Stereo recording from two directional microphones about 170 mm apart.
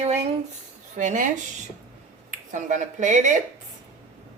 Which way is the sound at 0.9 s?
50° right (ahead or behind).